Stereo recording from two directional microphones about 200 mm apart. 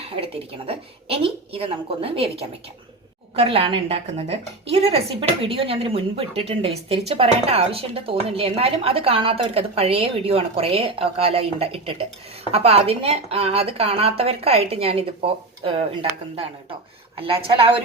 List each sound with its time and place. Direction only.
0.0 s a woman's voice: 30° right (ahead or behind)